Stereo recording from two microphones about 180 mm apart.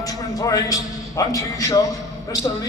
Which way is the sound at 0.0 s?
20° left (ahead or behind).